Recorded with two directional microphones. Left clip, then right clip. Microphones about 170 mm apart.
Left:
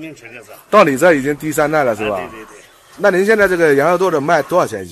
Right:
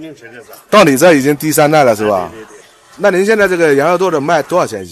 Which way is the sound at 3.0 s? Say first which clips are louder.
Right 2 dB; 5° right (ahead or behind).